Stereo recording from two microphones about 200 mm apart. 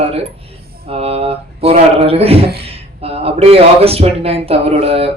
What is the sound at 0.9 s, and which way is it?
A man's voice, 30° right (ahead or behind).